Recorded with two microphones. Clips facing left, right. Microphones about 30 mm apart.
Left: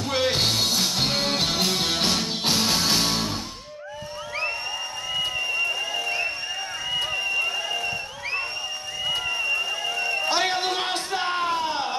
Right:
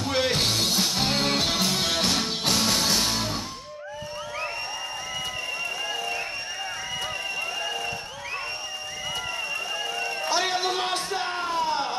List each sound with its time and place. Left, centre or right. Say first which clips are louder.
0.1 s music: left 2 dB; centre
1.0 s music: even; centre
1.6 s music: left 1 dB; centre
10.3 s a sound: right 2 dB; left